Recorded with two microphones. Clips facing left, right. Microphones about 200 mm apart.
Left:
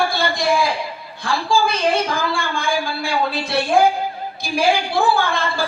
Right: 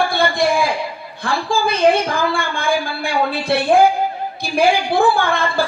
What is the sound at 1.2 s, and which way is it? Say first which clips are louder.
A woman's voice: even; 55° right (ahead or behind).